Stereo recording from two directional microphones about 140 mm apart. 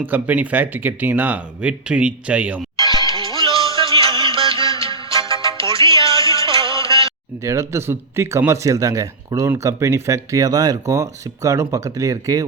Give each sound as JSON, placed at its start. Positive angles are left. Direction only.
{"t": 0.0, "sound": "speech", "side_deg": -10}
{"t": 2.7, "sound": "music", "side_deg": 30}
{"t": 3.2, "sound": "music", "side_deg": -40}
{"t": 5.3, "sound": "music", "side_deg": 25}
{"t": 5.6, "sound": "music", "side_deg": -40}
{"t": 6.0, "sound": "music", "side_deg": 25}
{"t": 6.4, "sound": "music", "side_deg": -40}
{"t": 7.4, "sound": "speech", "side_deg": -20}